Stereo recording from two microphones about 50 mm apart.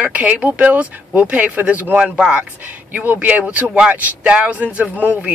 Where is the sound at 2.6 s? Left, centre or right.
Right.